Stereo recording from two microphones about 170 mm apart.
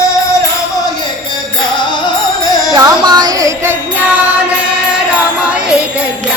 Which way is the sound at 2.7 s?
20° right (ahead or behind).